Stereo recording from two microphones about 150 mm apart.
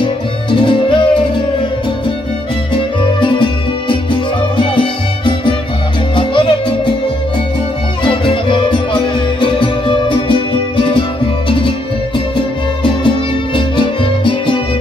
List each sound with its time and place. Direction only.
0.5 s music: 30° left (ahead or behind)
3.2 s music: 35° left (ahead or behind)
8.0 s music: 35° left (ahead or behind)
13.6 s music: 35° left (ahead or behind)